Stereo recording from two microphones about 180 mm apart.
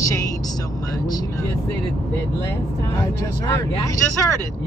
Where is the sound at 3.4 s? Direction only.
20° left (ahead or behind).